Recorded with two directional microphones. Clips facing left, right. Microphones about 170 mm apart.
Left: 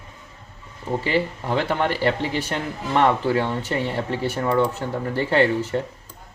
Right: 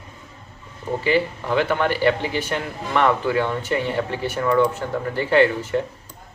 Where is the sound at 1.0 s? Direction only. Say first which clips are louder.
Right 4 dB; 35° left (ahead or behind).